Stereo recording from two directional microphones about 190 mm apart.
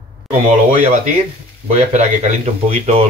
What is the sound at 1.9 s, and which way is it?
Speech, 35° right (ahead or behind).